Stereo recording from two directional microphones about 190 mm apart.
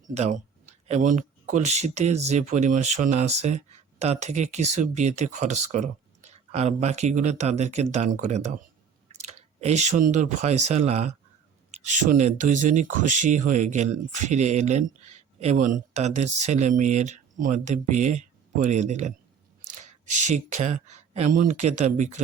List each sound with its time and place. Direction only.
0.1 s speech: 35° right (ahead or behind)